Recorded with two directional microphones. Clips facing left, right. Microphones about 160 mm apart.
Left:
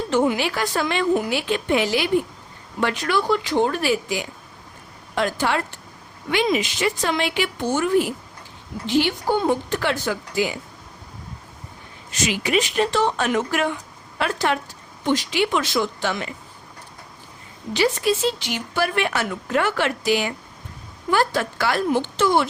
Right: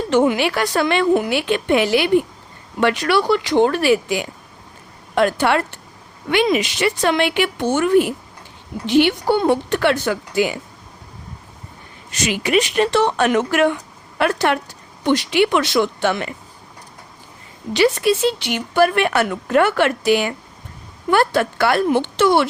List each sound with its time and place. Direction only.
0.1 s a woman's voice: 70° right (ahead or behind)
2.8 s a woman's voice: 80° right; by 10.6 s 60° right (ahead or behind)
12.2 s a woman's voice: 60° right (ahead or behind)
17.7 s a woman's voice: 65° right (ahead or behind)